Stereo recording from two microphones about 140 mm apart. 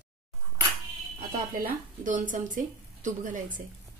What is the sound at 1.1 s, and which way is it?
Speech, 70° right (ahead or behind).